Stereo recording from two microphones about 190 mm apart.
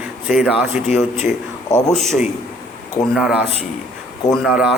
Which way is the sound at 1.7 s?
20° left (ahead or behind).